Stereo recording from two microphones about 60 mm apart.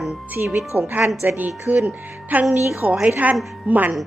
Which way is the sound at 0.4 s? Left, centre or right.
Right.